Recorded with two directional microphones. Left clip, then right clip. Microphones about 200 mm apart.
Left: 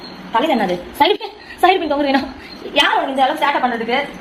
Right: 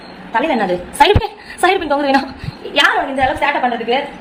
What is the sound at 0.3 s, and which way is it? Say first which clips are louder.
A woman's voice: right 1 dB; 10° right (ahead or behind).